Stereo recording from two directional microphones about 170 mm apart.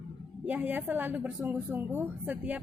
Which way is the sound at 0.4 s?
10° right (ahead or behind).